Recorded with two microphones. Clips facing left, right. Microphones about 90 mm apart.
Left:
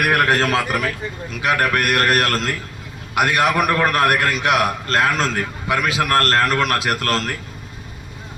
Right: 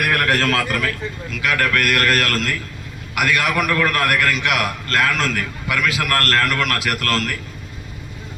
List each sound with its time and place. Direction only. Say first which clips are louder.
0.1 s a man's voice: left 1 dB; 20° left (ahead or behind)